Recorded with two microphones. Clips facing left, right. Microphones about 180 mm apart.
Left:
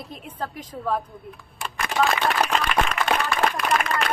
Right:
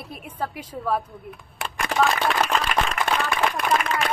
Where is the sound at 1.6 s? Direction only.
65° right (ahead or behind).